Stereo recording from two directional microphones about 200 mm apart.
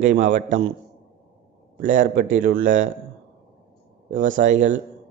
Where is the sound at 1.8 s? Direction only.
40° right (ahead or behind).